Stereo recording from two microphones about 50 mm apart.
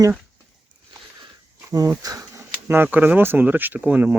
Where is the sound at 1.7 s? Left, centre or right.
Right.